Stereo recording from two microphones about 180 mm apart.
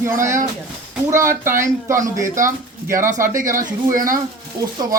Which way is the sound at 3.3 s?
45° right (ahead or behind).